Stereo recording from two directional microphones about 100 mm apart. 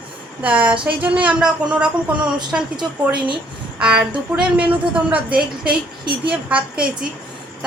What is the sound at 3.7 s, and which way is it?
A woman's voice, 10° right (ahead or behind).